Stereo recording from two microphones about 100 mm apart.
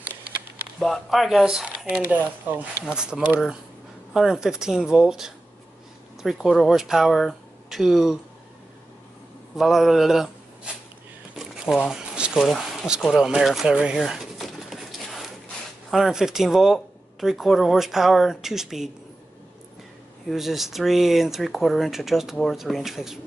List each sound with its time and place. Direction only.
0.7 s speech: 5° left (ahead or behind)
2.5 s speech: 15° right (ahead or behind)
9.6 s speech: centre (ahead or behind)
11.3 s a sound: 5° right (ahead or behind)
15.9 s speech: 5° right (ahead or behind)
20.2 s speech: centre (ahead or behind)